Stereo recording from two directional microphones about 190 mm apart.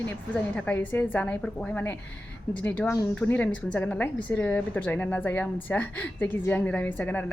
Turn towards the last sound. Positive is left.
turn(degrees=10)  # may be behind; listen again after turning